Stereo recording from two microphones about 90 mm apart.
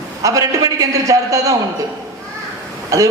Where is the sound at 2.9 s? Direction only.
35° right (ahead or behind).